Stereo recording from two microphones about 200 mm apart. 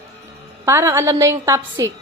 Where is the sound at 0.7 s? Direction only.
10° right (ahead or behind).